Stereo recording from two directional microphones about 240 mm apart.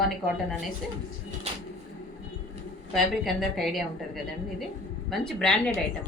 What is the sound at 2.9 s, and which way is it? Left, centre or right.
Speech, centre.